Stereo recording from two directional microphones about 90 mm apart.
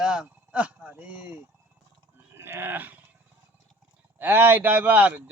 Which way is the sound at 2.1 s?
25° right (ahead or behind).